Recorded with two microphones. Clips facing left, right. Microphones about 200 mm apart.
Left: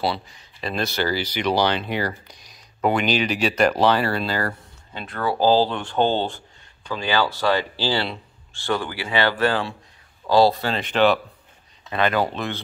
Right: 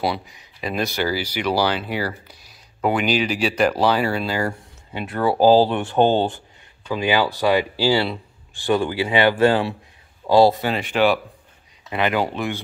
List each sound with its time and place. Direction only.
0.0 s speech: 15° right (ahead or behind)